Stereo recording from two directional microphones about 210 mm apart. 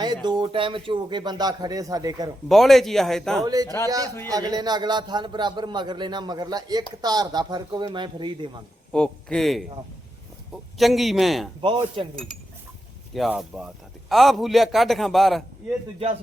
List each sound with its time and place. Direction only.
0.0 s a man's voice: 20° right (ahead or behind)
2.5 s a man's voice: centre (ahead or behind)
3.4 s a man's voice: 15° right (ahead or behind)
8.9 s a man's voice: 5° left (ahead or behind)
10.8 s a man's voice: centre (ahead or behind)
11.6 s a man's voice: 25° right (ahead or behind)
12.1 s a man's voice: centre (ahead or behind)